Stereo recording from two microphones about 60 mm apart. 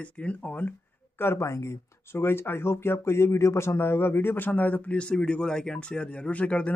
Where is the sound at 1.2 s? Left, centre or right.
Left.